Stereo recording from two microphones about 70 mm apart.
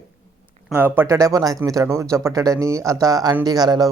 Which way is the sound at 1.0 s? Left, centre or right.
Right.